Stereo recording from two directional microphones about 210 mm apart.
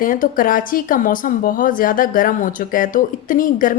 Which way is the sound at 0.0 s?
40° left (ahead or behind).